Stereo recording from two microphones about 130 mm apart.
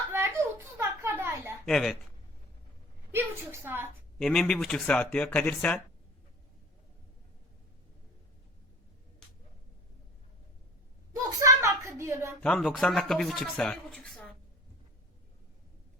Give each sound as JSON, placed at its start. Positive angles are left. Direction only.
{"t": 0.1, "sound": "a sound", "side_deg": -20}
{"t": 1.6, "sound": "speech", "side_deg": 5}
{"t": 3.1, "sound": "a woman's voice", "side_deg": -15}
{"t": 4.2, "sound": "speech", "side_deg": 5}
{"t": 11.1, "sound": "a sound", "side_deg": -25}
{"t": 12.4, "sound": "speech", "side_deg": 10}